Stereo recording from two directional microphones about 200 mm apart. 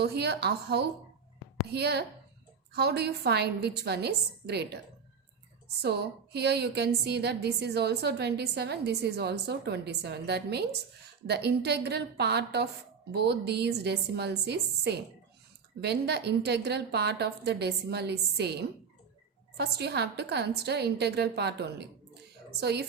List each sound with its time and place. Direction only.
0.0 s a woman's voice: 55° right (ahead or behind)
5.8 s a woman's voice: 55° right (ahead or behind)